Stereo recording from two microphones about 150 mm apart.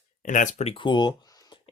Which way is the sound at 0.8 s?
30° left (ahead or behind).